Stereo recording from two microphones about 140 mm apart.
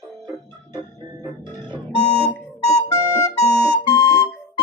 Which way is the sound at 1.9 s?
50° left (ahead or behind).